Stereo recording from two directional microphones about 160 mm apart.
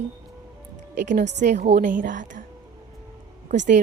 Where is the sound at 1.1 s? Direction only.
75° right (ahead or behind).